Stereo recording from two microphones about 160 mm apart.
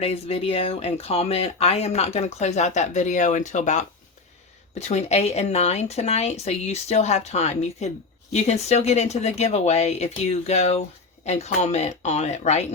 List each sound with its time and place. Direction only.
0.0 s a woman's voice: 40° left (ahead or behind)